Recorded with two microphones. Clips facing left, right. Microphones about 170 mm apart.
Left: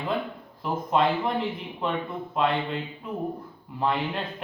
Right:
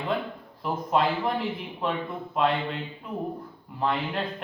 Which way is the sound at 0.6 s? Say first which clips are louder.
Left 1 dB; centre (ahead or behind).